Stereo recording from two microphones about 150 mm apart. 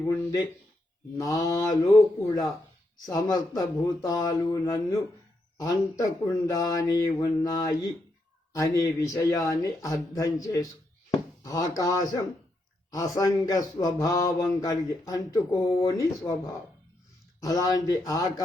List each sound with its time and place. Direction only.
0.1 s speech: 25° left (ahead or behind)
17.4 s speech: 25° left (ahead or behind)